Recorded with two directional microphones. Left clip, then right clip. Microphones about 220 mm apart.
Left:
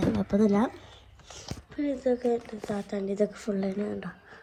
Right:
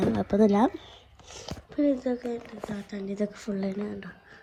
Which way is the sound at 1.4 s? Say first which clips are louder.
Right 4 dB; 30° right (ahead or behind).